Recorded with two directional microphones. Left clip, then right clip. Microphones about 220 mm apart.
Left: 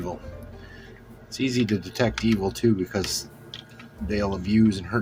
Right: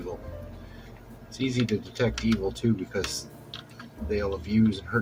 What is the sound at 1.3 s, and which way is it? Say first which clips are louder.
Speech: left 3 dB; 50° left (ahead or behind).